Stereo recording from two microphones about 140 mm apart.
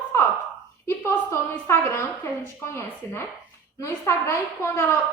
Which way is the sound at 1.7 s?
20° left (ahead or behind).